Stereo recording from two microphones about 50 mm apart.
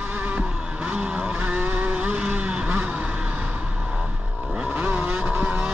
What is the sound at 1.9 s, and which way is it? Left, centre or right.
Vehicle, right.